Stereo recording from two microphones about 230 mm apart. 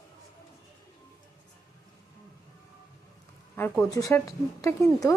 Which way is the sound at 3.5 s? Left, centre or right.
Centre.